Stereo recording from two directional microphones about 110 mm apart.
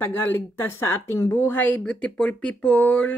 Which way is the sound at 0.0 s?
20° left (ahead or behind).